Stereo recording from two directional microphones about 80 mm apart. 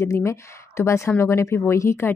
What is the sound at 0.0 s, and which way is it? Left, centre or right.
Speech, left.